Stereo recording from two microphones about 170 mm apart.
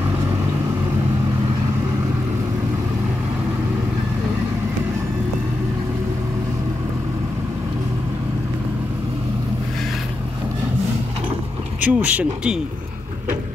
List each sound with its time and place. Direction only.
11.8 s speech: 10° right (ahead or behind)